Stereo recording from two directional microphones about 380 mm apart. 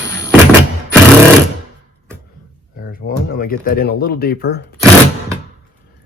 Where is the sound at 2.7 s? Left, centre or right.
Left.